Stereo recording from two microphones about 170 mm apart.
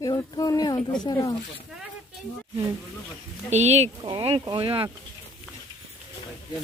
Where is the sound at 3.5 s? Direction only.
40° right (ahead or behind).